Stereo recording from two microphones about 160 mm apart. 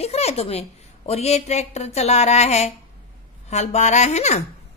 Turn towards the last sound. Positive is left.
turn(degrees=45)  # may be behind; listen again after turning